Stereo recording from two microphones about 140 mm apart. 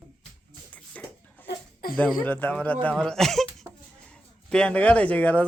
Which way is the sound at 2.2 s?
10° left (ahead or behind).